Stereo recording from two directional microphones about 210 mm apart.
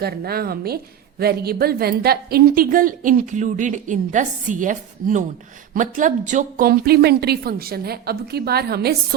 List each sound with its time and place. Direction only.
0.0 s a woman's voice: 45° right (ahead or behind)